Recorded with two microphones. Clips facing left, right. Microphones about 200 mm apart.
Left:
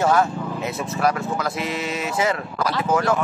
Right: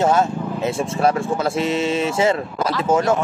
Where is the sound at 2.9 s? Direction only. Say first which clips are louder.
Right 3 dB; 25° right (ahead or behind).